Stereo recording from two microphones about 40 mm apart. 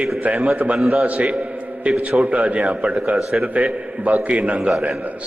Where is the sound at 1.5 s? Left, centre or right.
Right.